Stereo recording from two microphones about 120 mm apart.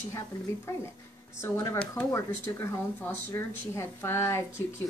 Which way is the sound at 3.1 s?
20° left (ahead or behind).